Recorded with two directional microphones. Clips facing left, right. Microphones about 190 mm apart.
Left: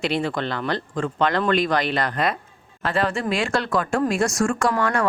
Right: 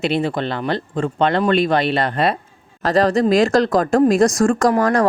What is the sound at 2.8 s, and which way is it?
Speech, 40° right (ahead or behind).